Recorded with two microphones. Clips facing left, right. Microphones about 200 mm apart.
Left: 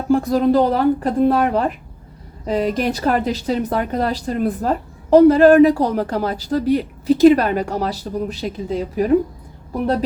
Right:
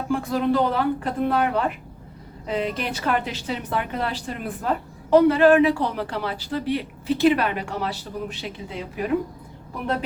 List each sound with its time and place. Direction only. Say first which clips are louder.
0.1 s speech: left 7 dB; 40° left (ahead or behind)